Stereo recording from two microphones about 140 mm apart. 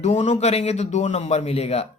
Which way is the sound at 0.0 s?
55° left (ahead or behind).